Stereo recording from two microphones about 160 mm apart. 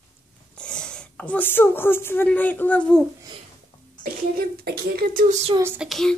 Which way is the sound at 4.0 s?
75° right (ahead or behind).